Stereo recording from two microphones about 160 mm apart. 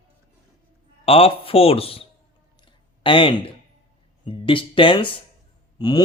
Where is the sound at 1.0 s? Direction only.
35° left (ahead or behind).